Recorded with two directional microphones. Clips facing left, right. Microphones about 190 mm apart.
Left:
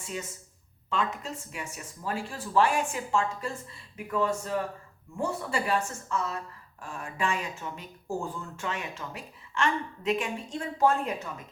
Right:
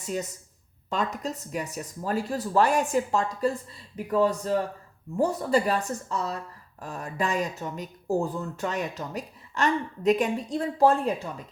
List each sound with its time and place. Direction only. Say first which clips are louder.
0.0 s speech: right 6 dB; 40° right (ahead or behind)